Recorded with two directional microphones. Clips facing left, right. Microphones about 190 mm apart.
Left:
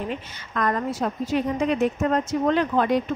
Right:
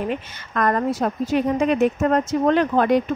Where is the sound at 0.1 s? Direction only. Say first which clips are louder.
Right 4 dB; 50° right (ahead or behind).